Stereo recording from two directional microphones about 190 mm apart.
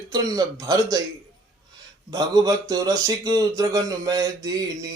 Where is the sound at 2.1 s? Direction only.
20° right (ahead or behind).